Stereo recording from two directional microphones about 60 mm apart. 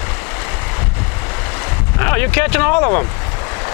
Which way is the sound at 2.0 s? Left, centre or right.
Left.